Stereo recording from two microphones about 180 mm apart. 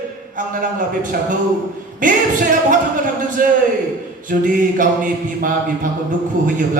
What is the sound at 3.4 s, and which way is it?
Speech, 50° right (ahead or behind).